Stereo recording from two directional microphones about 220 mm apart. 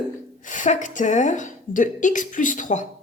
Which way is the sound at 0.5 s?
35° left (ahead or behind).